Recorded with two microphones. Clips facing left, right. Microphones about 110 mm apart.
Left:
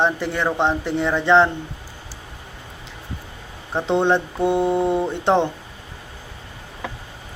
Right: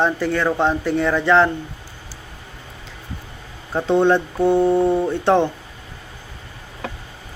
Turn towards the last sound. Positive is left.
turn(degrees=20)  # may be behind; listen again after turning